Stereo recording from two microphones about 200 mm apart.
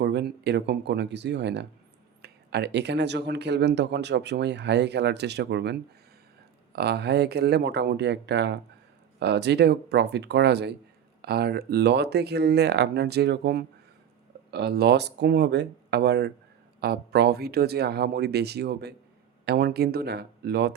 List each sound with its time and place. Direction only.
0.0 s speech: 55° right (ahead or behind)
6.7 s speech: 55° right (ahead or behind)